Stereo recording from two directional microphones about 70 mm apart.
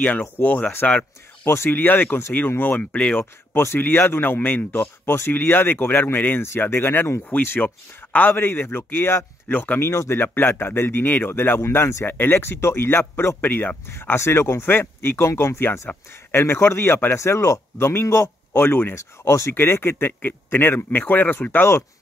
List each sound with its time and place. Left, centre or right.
0.0 s speech: left
1.4 s speech: left
2.8 s speech: centre
3.6 s speech: left
9.8 s speech: left
13.8 s speech: left
18.5 s speech: left